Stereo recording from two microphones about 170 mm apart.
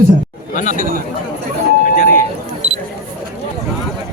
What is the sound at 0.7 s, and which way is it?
Speech, 55° right (ahead or behind).